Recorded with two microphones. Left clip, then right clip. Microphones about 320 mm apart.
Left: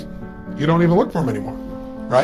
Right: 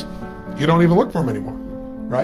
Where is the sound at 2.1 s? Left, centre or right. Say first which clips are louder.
Left 5 dB; centre.